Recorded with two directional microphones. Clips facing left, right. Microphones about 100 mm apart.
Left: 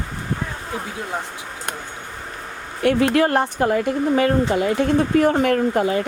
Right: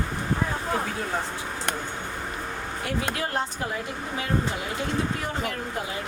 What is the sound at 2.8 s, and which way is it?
Speech, 65° left (ahead or behind).